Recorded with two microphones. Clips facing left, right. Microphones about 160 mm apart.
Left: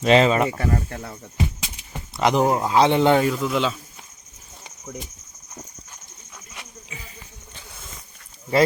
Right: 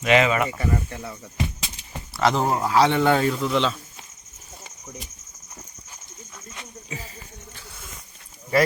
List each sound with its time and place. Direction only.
0.0 s speech: 30° left (ahead or behind)
0.5 s speech: 55° left (ahead or behind)
2.1 s speech: 15° left (ahead or behind)
3.2 s speech: 5° left (ahead or behind)
6.9 s a sound: 35° right (ahead or behind)